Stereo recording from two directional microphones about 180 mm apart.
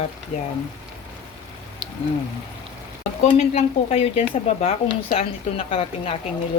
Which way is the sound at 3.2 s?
35° left (ahead or behind).